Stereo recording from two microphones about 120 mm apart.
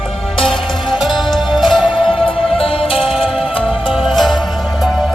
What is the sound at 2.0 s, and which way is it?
Music, 50° left (ahead or behind).